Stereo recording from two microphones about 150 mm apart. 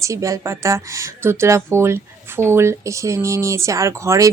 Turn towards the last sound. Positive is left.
turn(degrees=-20)  # may be behind; listen again after turning